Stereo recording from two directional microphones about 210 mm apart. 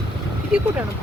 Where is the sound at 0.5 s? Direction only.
5° right (ahead or behind).